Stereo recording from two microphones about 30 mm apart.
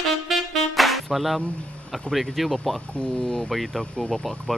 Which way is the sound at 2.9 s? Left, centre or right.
Left.